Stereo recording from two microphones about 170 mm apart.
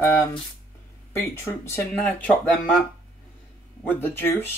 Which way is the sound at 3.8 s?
10° left (ahead or behind).